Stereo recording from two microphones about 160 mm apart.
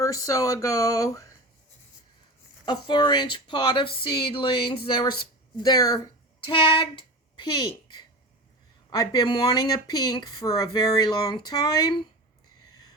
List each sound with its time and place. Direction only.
0.0 s speech: 20° left (ahead or behind)
2.6 s a woman's voice: 30° left (ahead or behind)